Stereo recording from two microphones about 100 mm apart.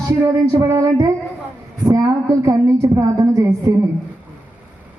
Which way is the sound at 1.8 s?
35° right (ahead or behind).